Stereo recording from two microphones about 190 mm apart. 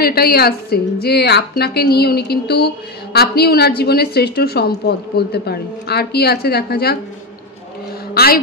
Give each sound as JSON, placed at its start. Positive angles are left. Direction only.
{"t": 0.0, "sound": "a woman's voice", "side_deg": 55}
{"t": 8.1, "sound": "a woman's voice", "side_deg": 55}